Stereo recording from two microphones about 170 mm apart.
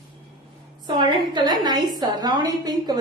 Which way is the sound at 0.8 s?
25° right (ahead or behind).